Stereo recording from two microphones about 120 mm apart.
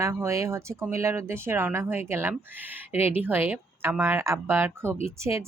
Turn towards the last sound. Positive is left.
turn(degrees=-25)  # may be behind; listen again after turning